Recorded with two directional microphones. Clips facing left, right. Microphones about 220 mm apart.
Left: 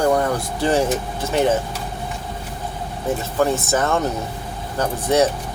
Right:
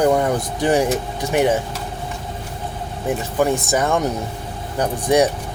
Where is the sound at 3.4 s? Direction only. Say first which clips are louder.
Right 1 dB; 15° right (ahead or behind).